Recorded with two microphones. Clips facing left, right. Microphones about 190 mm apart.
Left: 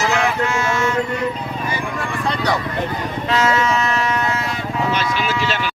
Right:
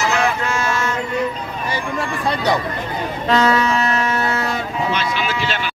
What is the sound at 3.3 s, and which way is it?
Vehicle, 35° right (ahead or behind).